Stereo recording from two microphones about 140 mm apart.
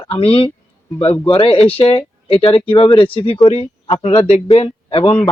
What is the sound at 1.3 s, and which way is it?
A man's voice, 40° left (ahead or behind).